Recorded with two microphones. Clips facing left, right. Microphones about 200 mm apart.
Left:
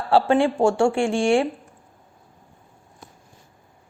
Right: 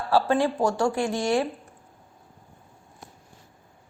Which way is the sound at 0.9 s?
75° left (ahead or behind).